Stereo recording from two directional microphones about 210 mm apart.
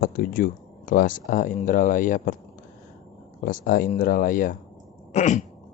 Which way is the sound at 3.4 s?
40° left (ahead or behind).